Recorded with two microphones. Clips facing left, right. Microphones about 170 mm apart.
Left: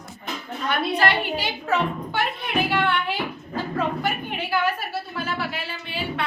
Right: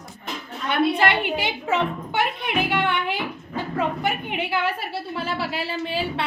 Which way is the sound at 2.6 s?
15° right (ahead or behind).